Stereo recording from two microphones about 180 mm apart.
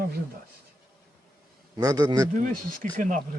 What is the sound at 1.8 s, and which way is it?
Speech, 20° right (ahead or behind).